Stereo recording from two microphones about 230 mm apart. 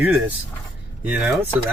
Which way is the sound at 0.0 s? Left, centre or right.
Centre.